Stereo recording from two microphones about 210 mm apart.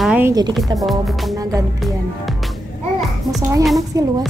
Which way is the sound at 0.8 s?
Centre (ahead or behind).